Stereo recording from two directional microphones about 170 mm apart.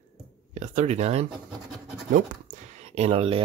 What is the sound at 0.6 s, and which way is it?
Speech, 45° right (ahead or behind).